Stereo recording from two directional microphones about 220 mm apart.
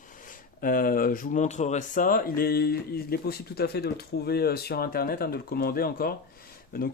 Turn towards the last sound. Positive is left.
turn(degrees=40)  # may be behind; listen again after turning